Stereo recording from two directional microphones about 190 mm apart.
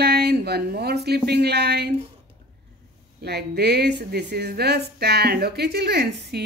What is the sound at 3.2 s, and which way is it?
A woman's voice, 60° right (ahead or behind).